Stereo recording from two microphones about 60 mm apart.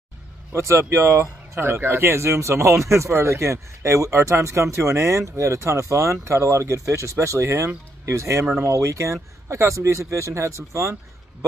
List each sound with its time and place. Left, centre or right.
0.5 s speech: right